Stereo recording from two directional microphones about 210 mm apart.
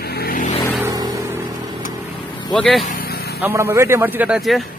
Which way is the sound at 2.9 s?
45° left (ahead or behind).